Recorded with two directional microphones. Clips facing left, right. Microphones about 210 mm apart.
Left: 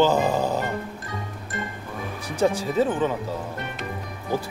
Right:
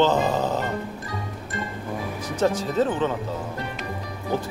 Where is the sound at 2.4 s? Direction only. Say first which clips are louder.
Left 1 dB; 10° left (ahead or behind).